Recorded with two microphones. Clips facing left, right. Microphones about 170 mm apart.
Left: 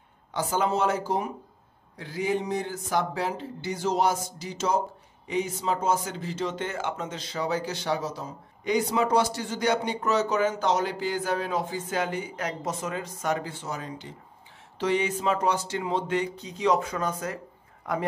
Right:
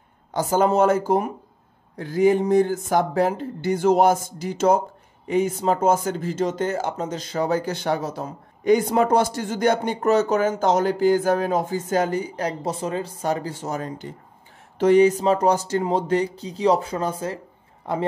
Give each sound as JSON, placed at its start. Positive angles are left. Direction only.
{"t": 0.3, "sound": "speech", "side_deg": -45}